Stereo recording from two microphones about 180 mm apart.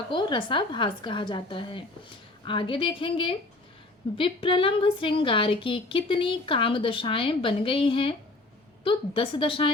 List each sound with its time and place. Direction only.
0.1 s a woman's voice: 25° left (ahead or behind)